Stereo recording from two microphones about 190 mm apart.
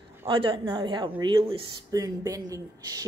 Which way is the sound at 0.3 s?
25° right (ahead or behind).